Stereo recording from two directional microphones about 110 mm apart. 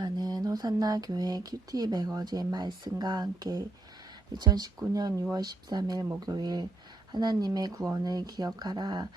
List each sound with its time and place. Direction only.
0.0 s speech: 35° right (ahead or behind)